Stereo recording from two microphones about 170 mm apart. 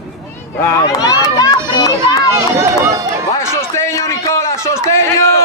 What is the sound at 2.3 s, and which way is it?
Run, 15° right (ahead or behind).